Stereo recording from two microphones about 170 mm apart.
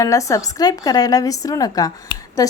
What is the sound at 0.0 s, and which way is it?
A woman's voice, 20° left (ahead or behind).